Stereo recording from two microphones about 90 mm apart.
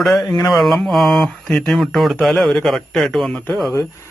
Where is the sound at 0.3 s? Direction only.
45° left (ahead or behind).